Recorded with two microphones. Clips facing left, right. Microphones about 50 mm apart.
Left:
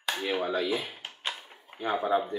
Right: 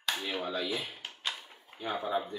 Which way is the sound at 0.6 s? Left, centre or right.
Left.